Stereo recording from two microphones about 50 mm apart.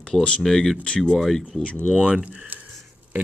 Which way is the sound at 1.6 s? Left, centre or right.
Left.